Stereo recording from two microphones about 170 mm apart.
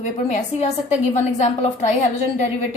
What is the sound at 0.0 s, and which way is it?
A woman's voice, 45° left (ahead or behind).